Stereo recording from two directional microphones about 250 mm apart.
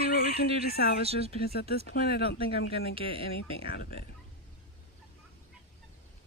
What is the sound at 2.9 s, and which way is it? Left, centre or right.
Speech, right.